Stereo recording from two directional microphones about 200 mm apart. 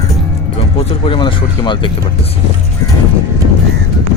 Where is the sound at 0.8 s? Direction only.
25° left (ahead or behind).